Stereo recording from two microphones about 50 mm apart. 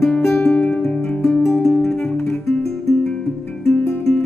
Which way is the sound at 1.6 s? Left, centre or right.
Centre.